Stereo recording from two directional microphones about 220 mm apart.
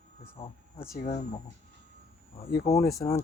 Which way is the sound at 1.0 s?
30° left (ahead or behind).